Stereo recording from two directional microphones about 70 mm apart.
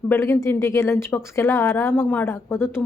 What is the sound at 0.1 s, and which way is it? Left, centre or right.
A woman's voice, left.